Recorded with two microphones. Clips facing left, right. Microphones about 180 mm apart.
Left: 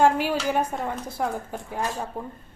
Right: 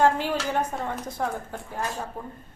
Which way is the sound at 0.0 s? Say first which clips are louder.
Left 2 dB; 10° left (ahead or behind).